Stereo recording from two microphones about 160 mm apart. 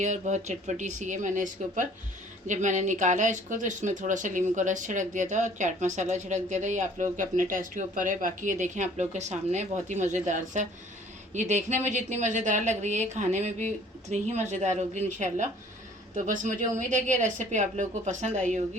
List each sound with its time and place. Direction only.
0.0 s speech: 50° right (ahead or behind)